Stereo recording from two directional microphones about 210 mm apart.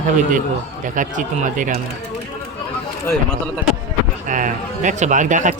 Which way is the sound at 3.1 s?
5° left (ahead or behind).